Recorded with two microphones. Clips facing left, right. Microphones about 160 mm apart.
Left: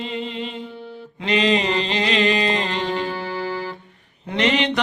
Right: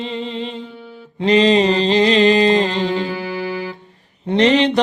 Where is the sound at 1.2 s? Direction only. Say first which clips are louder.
Right 7 dB; 35° right (ahead or behind).